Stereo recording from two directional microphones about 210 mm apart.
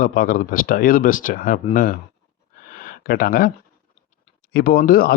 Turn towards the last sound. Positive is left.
turn(degrees=45)  # may be behind; listen again after turning